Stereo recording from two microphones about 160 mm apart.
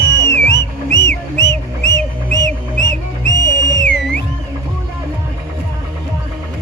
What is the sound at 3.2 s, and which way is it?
Music, 90° left.